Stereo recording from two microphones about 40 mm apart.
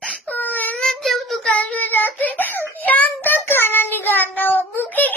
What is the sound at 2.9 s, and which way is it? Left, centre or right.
Child singing, left.